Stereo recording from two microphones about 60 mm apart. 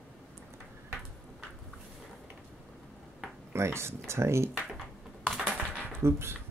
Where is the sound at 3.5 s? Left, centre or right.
Right.